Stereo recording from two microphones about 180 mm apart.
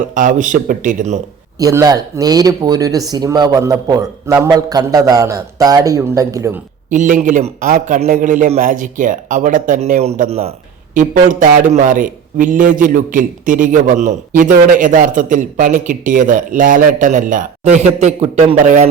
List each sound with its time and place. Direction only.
0.1 s a man's voice: 45° right (ahead or behind)
1.5 s speech: 20° right (ahead or behind)
6.9 s a man's voice: 45° right (ahead or behind)
10.9 s a man's voice: 45° right (ahead or behind)